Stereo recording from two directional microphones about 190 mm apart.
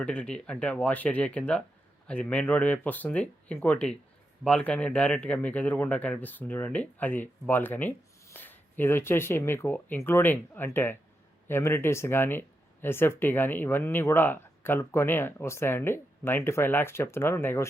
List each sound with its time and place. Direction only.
0.0 s speech: 5° left (ahead or behind)